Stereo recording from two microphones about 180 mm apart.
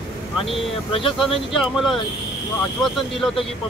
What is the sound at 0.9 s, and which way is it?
Speech, 30° left (ahead or behind).